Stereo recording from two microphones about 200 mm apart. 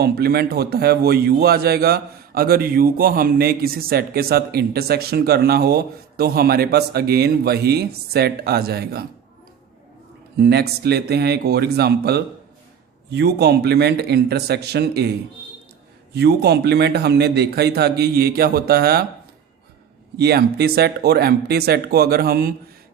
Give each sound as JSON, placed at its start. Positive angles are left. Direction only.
{"t": 0.0, "sound": "a man's voice", "side_deg": -50}
{"t": 10.3, "sound": "a man's voice", "side_deg": -55}
{"t": 16.1, "sound": "a man's voice", "side_deg": -55}
{"t": 20.1, "sound": "a man's voice", "side_deg": -55}